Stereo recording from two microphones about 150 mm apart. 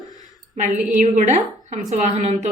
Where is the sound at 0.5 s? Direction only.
55° right (ahead or behind).